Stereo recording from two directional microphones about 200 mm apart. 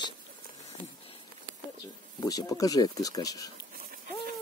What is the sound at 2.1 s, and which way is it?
Speech, 20° left (ahead or behind).